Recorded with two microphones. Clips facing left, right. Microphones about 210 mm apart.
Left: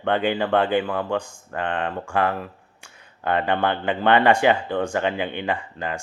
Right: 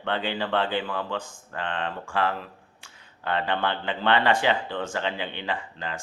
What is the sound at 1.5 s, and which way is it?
Speech, 60° left (ahead or behind).